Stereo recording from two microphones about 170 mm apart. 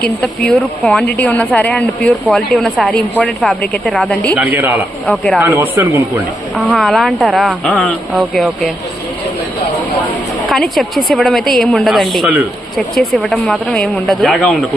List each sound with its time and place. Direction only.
0.2 s a woman's voice: 5° left (ahead or behind)
4.4 s speech: 10° right (ahead or behind)
5.0 s speech: 5° left (ahead or behind)
5.4 s speech: 15° right (ahead or behind)
6.7 s speech: centre (ahead or behind)
10.5 s speech: centre (ahead or behind)